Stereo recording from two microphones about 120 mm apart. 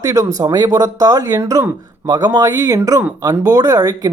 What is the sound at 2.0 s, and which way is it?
Speech, 35° right (ahead or behind).